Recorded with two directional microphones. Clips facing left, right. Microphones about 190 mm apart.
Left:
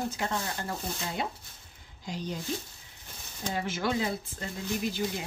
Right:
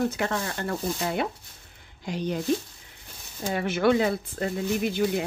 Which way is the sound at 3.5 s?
65° right (ahead or behind).